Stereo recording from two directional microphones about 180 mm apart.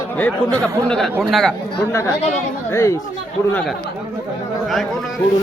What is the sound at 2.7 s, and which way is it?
Speech, 15° left (ahead or behind).